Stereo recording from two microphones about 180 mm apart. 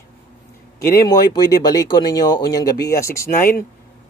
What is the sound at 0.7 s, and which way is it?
Speech, 20° left (ahead or behind).